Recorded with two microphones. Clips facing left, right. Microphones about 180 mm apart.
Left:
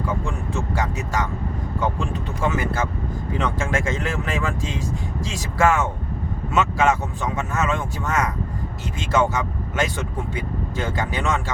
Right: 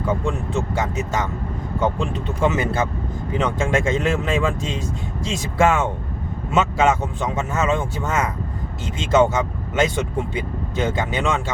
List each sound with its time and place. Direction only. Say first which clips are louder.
0.8 s speech: right 2 dB; 20° right (ahead or behind)